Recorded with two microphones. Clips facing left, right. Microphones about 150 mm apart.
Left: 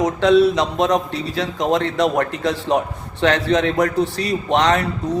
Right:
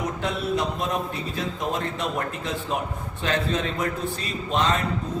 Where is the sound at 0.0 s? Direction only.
90° left.